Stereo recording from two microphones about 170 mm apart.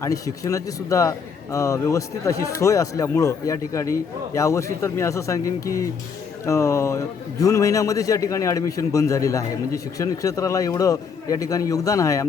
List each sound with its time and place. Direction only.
0.0 s a man's voice: 20° left (ahead or behind)